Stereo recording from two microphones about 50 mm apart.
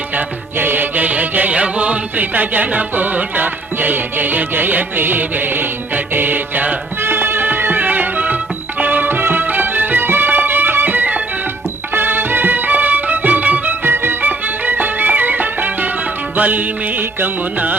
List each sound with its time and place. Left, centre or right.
0.2 s music: right
7.0 s music: right